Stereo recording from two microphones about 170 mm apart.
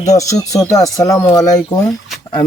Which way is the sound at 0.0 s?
20° left (ahead or behind).